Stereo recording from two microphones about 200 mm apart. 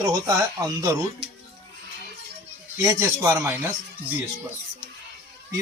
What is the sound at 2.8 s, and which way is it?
A man's voice, 15° right (ahead or behind).